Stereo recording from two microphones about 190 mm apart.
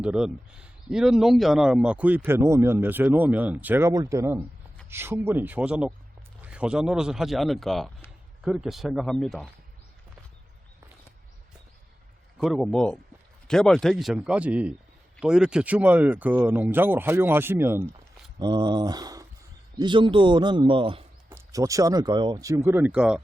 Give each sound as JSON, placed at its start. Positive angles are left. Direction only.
{"t": 0.0, "sound": "a man's voice", "side_deg": -5}
{"t": 12.4, "sound": "a man's voice", "side_deg": 0}
{"t": 18.3, "sound": "speech", "side_deg": -20}
{"t": 21.2, "sound": "a man's voice", "side_deg": -15}